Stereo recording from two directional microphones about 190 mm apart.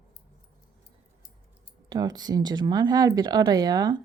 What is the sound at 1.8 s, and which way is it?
Speech, 20° right (ahead or behind).